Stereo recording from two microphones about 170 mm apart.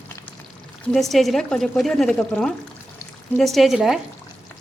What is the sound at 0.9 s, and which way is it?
Speech, centre (ahead or behind).